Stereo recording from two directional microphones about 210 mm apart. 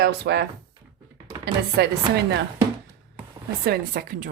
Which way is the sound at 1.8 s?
55° right (ahead or behind).